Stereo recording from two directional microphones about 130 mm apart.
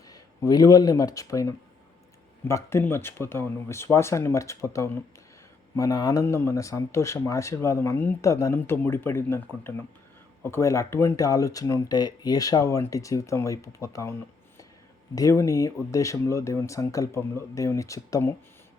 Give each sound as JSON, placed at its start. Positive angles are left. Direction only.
{"t": 0.1, "sound": "speech", "side_deg": 30}